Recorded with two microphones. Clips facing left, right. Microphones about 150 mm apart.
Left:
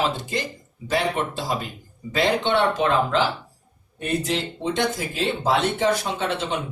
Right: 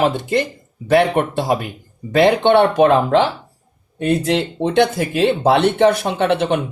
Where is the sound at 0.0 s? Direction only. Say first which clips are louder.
Right 8 dB; 60° right (ahead or behind).